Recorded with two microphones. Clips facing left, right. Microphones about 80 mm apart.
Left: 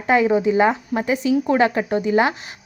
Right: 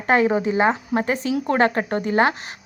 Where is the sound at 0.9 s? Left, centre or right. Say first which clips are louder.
Left 2 dB; right.